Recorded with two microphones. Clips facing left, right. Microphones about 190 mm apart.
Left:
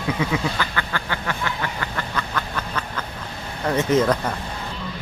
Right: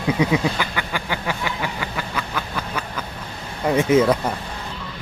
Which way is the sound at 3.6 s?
10° right (ahead or behind).